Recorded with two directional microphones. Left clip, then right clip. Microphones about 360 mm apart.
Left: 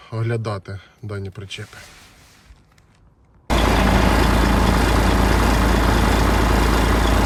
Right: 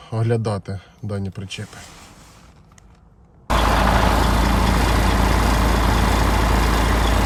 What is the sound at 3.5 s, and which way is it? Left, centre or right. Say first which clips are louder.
Vehicle: right 1 dB; centre.